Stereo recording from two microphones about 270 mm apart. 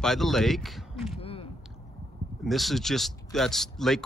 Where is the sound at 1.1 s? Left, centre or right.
Left.